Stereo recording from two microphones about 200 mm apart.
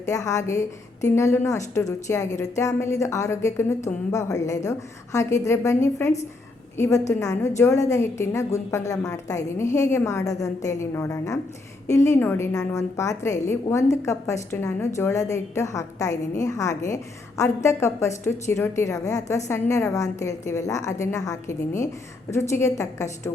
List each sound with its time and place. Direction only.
0.1 s a woman's voice: 15° left (ahead or behind)